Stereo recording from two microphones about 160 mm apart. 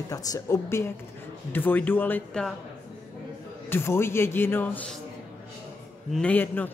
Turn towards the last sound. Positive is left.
turn(degrees=10)  # may be behind; listen again after turning